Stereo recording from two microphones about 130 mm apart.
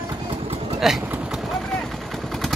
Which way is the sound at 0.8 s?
Centre (ahead or behind).